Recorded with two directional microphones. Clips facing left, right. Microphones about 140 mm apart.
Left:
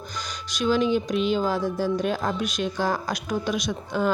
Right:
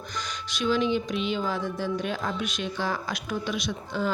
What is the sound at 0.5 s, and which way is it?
A woman's voice, 40° left (ahead or behind).